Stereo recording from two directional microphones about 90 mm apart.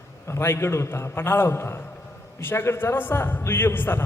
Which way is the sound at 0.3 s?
25° left (ahead or behind).